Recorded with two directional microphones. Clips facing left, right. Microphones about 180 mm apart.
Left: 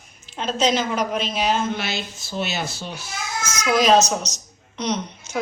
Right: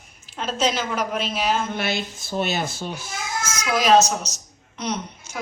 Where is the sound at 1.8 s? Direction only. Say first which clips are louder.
Right 2 dB; 55° right (ahead or behind).